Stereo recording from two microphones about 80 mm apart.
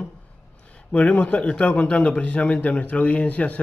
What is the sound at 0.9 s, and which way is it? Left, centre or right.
A man's voice, centre.